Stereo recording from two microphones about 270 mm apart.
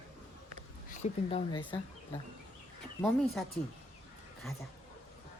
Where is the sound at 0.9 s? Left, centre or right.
Centre.